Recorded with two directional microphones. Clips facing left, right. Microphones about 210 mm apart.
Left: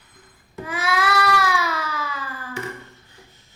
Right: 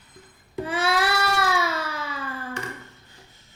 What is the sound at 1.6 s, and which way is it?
Baby cry, 25° right (ahead or behind).